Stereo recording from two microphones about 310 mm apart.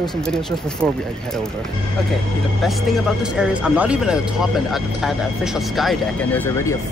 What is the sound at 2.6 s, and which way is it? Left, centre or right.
Speech, centre.